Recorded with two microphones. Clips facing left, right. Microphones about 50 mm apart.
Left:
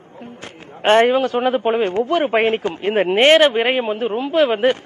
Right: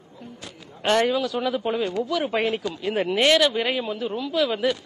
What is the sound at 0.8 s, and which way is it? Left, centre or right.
A man's voice, left.